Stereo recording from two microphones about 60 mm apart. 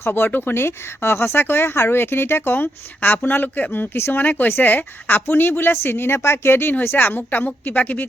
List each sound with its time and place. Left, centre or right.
0.0 s speech: left
3.9 s speech: left
4.2 s speech: left